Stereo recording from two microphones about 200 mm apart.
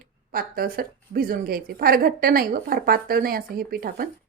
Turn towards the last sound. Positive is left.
turn(degrees=-50)  # may be behind; listen again after turning